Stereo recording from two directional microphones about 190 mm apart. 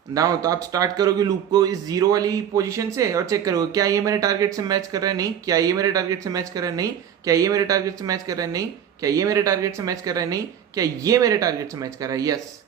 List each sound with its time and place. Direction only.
0.1 s a man's voice: 20° right (ahead or behind)